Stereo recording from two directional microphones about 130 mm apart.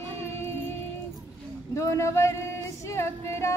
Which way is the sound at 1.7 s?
20° left (ahead or behind).